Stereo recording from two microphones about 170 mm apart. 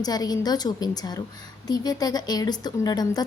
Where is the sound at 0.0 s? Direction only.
20° left (ahead or behind).